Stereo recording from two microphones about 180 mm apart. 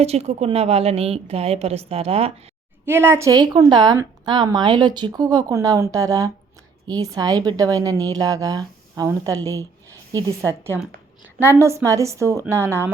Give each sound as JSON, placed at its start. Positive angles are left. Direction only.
{"t": 0.0, "sound": "a woman's voice", "side_deg": -35}
{"t": 2.8, "sound": "a woman's voice", "side_deg": -10}